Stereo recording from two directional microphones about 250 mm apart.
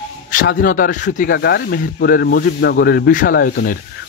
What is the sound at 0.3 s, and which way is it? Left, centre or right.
Speech, left.